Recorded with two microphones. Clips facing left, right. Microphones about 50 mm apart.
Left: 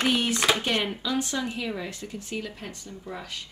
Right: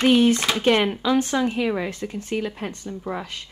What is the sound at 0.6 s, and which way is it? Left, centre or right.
Speech, right.